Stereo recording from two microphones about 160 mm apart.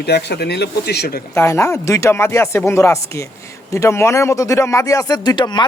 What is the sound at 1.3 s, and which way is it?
Speech, 15° left (ahead or behind).